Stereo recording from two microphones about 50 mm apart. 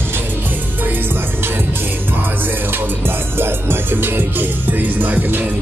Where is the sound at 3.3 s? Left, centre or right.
Right.